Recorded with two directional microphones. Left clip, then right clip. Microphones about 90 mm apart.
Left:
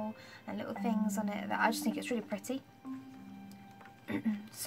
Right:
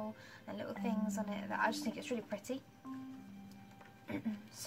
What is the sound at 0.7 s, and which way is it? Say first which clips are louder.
A woman's voice: left 5 dB; 40° left (ahead or behind).